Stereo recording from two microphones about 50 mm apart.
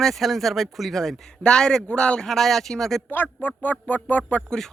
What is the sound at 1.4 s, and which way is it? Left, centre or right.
Speech, centre.